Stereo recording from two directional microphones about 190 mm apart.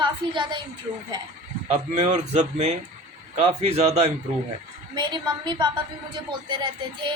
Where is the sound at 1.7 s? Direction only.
35° right (ahead or behind).